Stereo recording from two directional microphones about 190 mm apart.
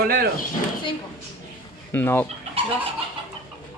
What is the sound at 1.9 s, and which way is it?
Speech, 10° left (ahead or behind).